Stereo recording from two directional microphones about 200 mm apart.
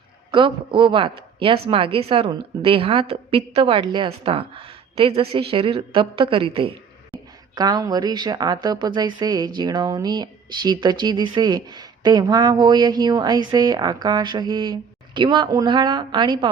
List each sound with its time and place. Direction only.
0.3 s speech: 25° right (ahead or behind)